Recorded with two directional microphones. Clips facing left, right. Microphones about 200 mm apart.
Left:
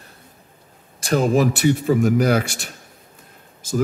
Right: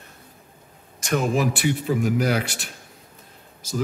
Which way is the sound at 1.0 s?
35° left (ahead or behind).